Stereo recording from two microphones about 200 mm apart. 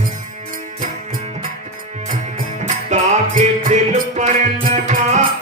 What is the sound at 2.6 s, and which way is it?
Music, 40° right (ahead or behind).